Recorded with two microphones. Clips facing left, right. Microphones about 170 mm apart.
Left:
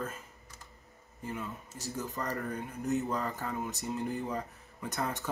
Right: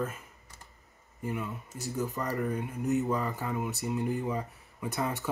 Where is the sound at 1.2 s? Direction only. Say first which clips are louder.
Right 4 dB; 15° right (ahead or behind).